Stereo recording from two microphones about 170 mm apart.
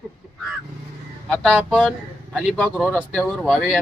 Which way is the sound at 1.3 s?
5° left (ahead or behind).